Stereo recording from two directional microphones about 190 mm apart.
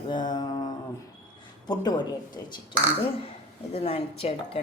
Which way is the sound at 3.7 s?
35° left (ahead or behind).